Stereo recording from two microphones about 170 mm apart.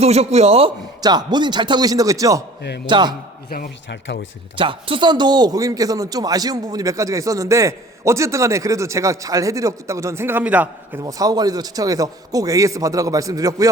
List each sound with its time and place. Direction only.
0.0 s a man's voice: 40° right (ahead or behind)
1.0 s a man's voice: 25° right (ahead or behind)
2.6 s a man's voice: 75° left (ahead or behind)
2.8 s a man's voice: 25° right (ahead or behind)
3.5 s speech: 75° left (ahead or behind); by 4.3 s 90° left
4.5 s a man's voice: 30° right (ahead or behind); by 11.0 s 10° right (ahead or behind)
11.0 s a man's voice: 20° right (ahead or behind)